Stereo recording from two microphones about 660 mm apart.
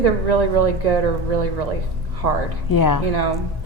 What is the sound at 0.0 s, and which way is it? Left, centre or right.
A woman's voice, right.